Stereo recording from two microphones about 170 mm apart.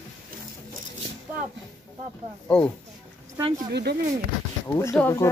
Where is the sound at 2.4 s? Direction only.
10° left (ahead or behind).